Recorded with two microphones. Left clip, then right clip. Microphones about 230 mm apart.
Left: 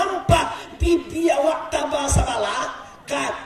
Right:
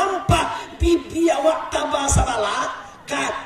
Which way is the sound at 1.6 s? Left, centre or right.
Centre.